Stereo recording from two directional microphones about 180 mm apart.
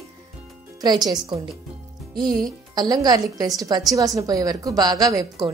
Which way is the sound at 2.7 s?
20° right (ahead or behind).